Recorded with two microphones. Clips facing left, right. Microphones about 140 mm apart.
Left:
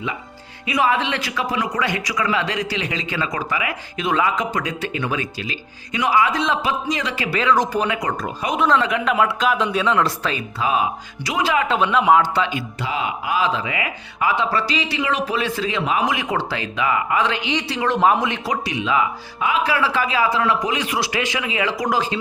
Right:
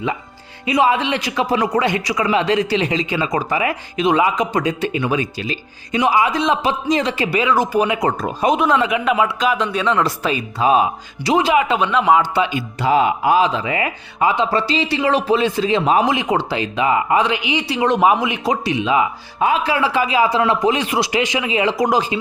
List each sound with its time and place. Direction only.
0.6 s a man's voice: 25° right (ahead or behind)
1.5 s a man's voice: 30° right (ahead or behind)
3.5 s speech: 35° right (ahead or behind)
3.9 s a man's voice: 20° right (ahead or behind)
5.4 s a man's voice: 30° right (ahead or behind)
7.3 s speech: 10° right (ahead or behind)
8.2 s speech: 35° right (ahead or behind)
8.5 s a man's voice: 10° right (ahead or behind)
10.6 s a man's voice: 25° right (ahead or behind)
11.7 s a man's voice: centre (ahead or behind)
12.8 s speech: 45° right (ahead or behind)
14.3 s a man's voice: 25° right (ahead or behind)
18.4 s a man's voice: 25° right (ahead or behind)